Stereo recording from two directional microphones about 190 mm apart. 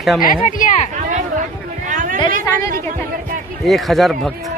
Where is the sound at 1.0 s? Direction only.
40° right (ahead or behind).